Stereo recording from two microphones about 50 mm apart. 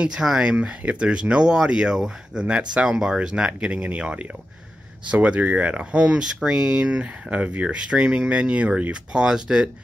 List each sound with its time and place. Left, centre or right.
0.0 s speech: centre